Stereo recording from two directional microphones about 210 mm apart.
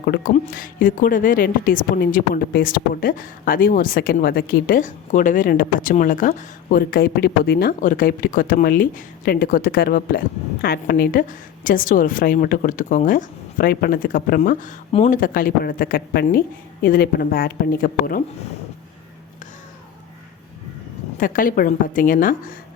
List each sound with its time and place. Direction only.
0.0 s a woman's voice: 45° left (ahead or behind)
21.2 s a woman's voice: 40° left (ahead or behind)